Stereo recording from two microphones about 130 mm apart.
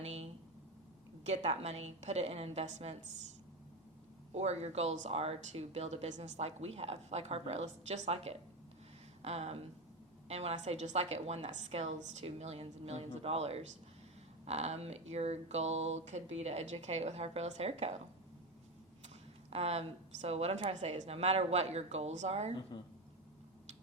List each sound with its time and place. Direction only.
1.2 s speech: 60° right (ahead or behind)
4.3 s speech: 55° right (ahead or behind)
19.0 s a sound: 50° right (ahead or behind)
20.2 s speech: 50° right (ahead or behind)